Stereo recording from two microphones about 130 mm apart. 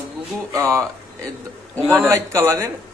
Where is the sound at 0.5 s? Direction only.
25° right (ahead or behind).